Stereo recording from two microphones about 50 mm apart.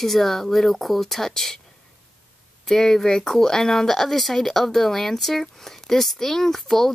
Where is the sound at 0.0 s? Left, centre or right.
Centre.